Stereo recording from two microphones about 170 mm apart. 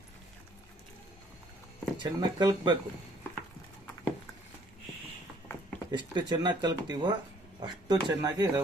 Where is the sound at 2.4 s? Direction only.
25° right (ahead or behind).